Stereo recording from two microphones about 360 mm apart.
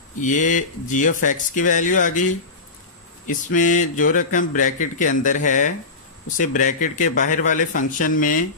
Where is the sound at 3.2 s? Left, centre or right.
Left.